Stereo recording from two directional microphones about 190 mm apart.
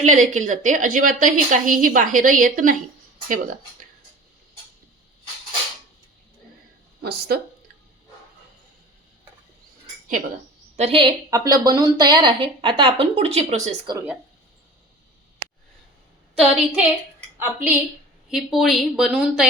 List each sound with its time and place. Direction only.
0.0 s a woman's voice: 40° right (ahead or behind)
7.0 s a woman's voice: 55° right (ahead or behind)
10.8 s a woman's voice: 30° right (ahead or behind)
11.3 s speech: 20° right (ahead or behind); by 13.9 s 35° right (ahead or behind)
13.9 s a woman's voice: 10° right (ahead or behind)
16.4 s a woman's voice: centre (ahead or behind)